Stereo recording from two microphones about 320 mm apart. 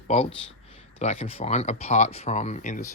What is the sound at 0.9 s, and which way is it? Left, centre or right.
Speech, centre.